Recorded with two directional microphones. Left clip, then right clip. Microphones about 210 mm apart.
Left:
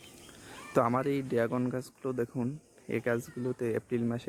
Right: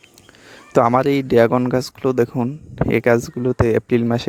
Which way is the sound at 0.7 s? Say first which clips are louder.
Right 13 dB; 40° right (ahead or behind).